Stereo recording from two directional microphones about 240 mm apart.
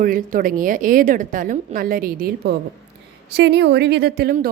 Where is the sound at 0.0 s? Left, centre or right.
Right.